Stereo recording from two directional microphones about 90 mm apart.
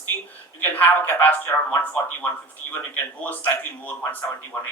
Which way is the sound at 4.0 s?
20° left (ahead or behind).